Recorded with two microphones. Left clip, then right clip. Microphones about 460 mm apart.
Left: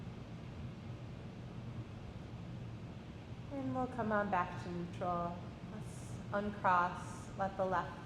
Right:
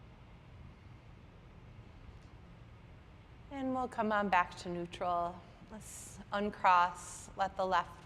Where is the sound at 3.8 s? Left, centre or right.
Right.